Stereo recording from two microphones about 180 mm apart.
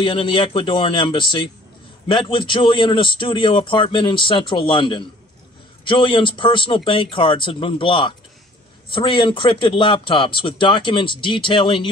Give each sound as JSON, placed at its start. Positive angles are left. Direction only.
{"t": 0.0, "sound": "a man's voice", "side_deg": 30}